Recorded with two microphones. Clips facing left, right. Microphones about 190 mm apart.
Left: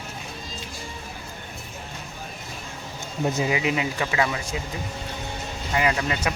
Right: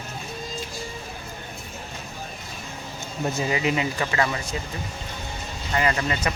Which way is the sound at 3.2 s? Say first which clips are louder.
Left 1 dB; 10° left (ahead or behind).